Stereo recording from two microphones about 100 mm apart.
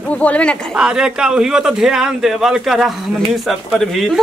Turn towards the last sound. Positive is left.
turn(degrees=0)  # may be behind; listen again after turning